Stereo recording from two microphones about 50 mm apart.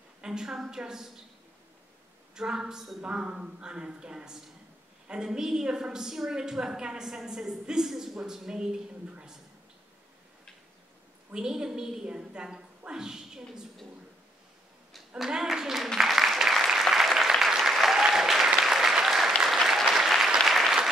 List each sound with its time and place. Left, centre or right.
0.2 s a sound: centre
0.7 s a woman's voice: centre
2.3 s a woman's voice: centre
11.3 s a woman's voice: centre
15.4 s a sound: centre
16.0 s applause: centre